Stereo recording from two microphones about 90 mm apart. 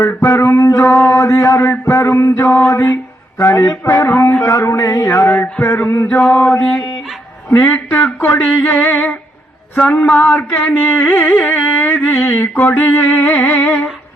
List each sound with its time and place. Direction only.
0.0 s music: 25° left (ahead or behind)
0.9 s a man's voice: 25° left (ahead or behind)
1.9 s music: 30° left (ahead or behind)
6.1 s mantra: 10° left (ahead or behind)
9.7 s music: 15° left (ahead or behind)